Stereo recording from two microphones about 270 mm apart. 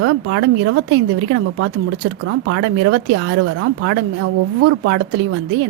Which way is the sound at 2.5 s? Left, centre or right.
Right.